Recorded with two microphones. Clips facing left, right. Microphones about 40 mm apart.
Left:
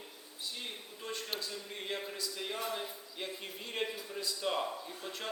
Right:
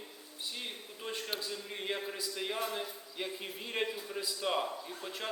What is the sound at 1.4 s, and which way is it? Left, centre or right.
A man's voice, centre.